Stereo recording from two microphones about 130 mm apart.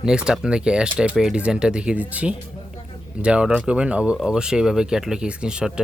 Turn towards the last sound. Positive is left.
turn(degrees=-5)  # may be behind; listen again after turning